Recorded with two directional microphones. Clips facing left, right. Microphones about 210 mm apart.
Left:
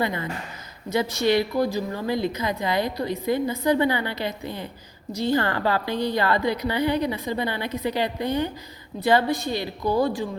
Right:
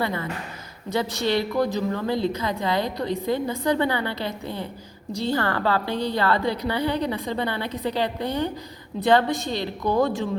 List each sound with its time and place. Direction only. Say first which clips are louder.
0.0 s a woman's voice: even; 15° left (ahead or behind)
9.5 s a woman's voice: even; 5° left (ahead or behind)